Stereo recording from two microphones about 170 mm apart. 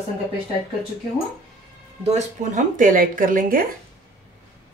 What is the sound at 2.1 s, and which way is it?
Speech, 45° right (ahead or behind).